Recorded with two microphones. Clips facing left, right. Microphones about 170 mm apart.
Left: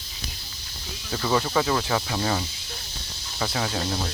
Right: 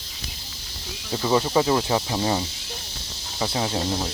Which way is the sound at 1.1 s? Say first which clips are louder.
Right 3 dB; 20° right (ahead or behind).